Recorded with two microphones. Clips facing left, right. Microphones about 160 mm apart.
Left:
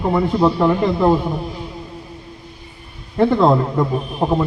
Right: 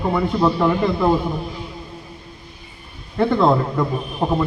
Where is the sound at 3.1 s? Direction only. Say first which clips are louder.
Left 2 dB; 15° left (ahead or behind).